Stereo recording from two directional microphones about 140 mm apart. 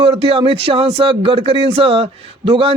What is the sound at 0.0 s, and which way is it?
A man's voice, 40° right (ahead or behind).